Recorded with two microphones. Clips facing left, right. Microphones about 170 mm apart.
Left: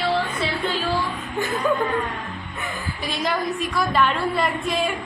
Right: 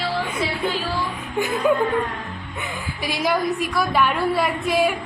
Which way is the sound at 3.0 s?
10° right (ahead or behind).